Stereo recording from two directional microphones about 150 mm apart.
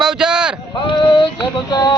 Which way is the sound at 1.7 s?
30° left (ahead or behind).